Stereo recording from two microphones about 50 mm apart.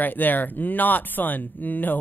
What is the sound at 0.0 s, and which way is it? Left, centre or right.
Speech, left.